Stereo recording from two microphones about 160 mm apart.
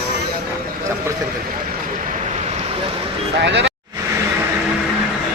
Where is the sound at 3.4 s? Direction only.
90° right.